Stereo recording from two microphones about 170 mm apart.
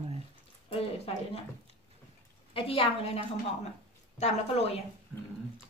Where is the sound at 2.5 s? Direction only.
30° left (ahead or behind).